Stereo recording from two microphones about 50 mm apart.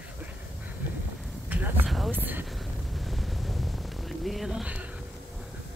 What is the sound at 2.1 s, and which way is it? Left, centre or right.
Speech, right.